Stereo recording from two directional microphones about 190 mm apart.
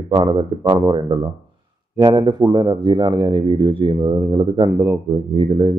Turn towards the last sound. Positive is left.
turn(degrees=-30)  # may be behind; listen again after turning